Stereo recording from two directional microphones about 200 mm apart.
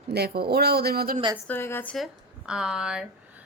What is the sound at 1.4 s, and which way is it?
Speech, 10° left (ahead or behind).